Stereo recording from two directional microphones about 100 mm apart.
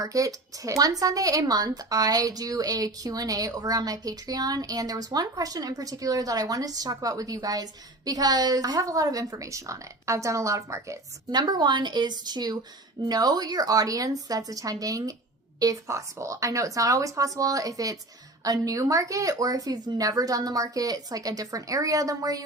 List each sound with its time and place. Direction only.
0.0 s speech: 35° right (ahead or behind)
11.3 s a woman's voice: 45° right (ahead or behind)